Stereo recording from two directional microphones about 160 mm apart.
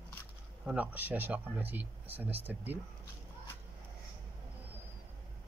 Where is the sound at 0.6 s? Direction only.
10° right (ahead or behind).